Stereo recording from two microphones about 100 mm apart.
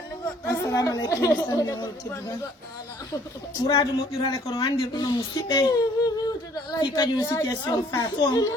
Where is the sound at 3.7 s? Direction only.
65° left (ahead or behind).